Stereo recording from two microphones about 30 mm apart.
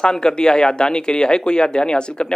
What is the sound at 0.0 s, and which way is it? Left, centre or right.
A man's voice, left.